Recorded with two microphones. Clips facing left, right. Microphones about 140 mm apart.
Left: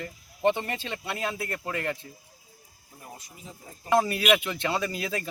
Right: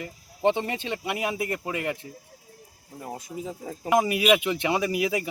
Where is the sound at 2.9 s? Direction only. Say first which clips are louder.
Right 9 dB; 80° right.